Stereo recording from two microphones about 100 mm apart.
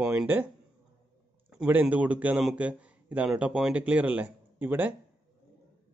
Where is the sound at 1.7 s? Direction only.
15° right (ahead or behind).